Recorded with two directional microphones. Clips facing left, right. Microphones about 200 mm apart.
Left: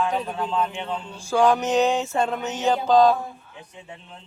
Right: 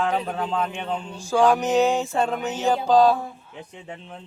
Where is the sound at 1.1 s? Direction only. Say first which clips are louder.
Even; 15° right (ahead or behind).